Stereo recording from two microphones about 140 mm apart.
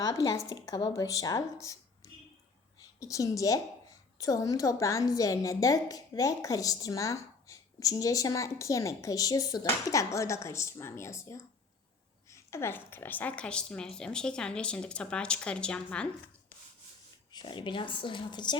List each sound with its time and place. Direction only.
0.0 s a woman's voice: 25° left (ahead or behind); by 16.0 s 5° left (ahead or behind)
17.3 s speech: 35° left (ahead or behind)